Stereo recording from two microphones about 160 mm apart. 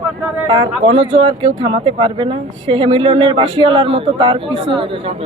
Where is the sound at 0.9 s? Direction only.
35° right (ahead or behind).